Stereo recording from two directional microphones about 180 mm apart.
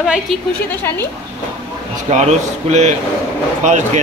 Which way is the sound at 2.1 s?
40° right (ahead or behind).